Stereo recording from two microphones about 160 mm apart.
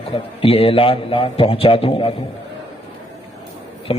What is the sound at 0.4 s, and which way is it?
A man's voice, 35° left (ahead or behind).